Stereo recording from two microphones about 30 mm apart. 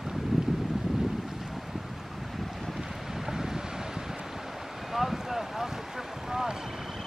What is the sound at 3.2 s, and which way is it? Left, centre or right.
Wind, centre.